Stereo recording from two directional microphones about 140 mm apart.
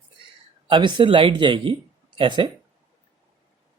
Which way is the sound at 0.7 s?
35° right (ahead or behind).